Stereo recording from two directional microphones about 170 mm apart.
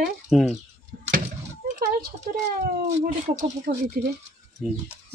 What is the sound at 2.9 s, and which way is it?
Speech, 45° right (ahead or behind).